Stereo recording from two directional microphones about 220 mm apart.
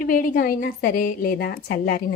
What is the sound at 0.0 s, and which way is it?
A woman's voice, 40° left (ahead or behind).